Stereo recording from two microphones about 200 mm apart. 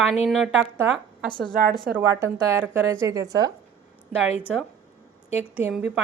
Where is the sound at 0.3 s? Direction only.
Centre (ahead or behind).